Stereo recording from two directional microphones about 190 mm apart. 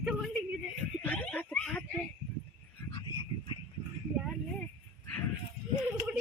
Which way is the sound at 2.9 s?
25° left (ahead or behind).